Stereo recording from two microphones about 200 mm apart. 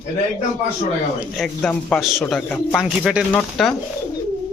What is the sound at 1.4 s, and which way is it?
A man's voice, 5° left (ahead or behind).